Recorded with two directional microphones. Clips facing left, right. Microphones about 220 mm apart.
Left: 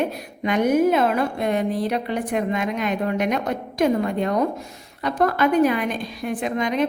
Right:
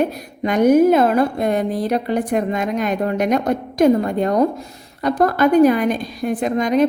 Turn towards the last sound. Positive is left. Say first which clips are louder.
# right 6 dB
turn(degrees=-40)  # may be behind; listen again after turning